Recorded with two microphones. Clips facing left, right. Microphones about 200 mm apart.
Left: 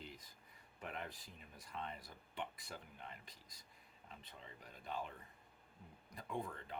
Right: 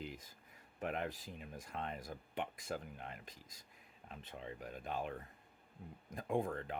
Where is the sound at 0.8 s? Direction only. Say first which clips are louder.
Right 8 dB; 55° right (ahead or behind).